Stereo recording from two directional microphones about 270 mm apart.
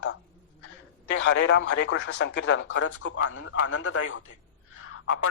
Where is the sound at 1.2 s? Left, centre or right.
Left.